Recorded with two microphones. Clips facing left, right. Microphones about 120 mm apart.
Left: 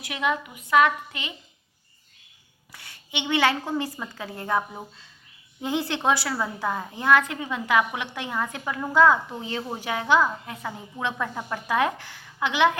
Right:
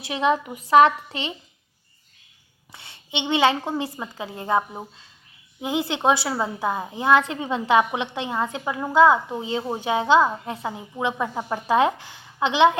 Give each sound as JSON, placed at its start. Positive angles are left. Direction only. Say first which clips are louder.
{"t": 0.0, "sound": "a woman's voice", "louder": "right 5 dB", "side_deg": -30}
{"t": 2.7, "sound": "a woman's voice", "louder": "right 3 dB", "side_deg": -25}